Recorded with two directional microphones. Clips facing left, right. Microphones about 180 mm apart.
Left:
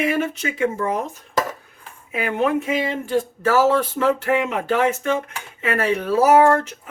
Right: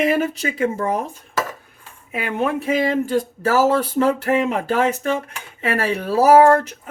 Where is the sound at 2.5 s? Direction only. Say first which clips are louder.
Right 3 dB; 35° right (ahead or behind).